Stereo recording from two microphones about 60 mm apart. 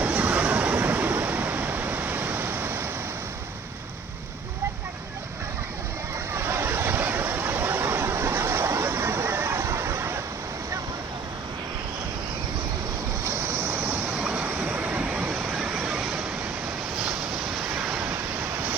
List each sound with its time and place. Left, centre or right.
0.0 s waves: right
6.3 s a sound: right
13.2 s vehicle: right
14.2 s vehicle: right
17.5 s waves: centre